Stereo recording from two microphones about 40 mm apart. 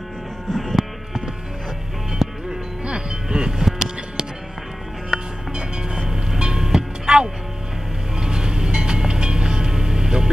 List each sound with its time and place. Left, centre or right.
0.7 s music: centre
2.2 s music: centre
2.8 s music: right
8.2 s vehicle: centre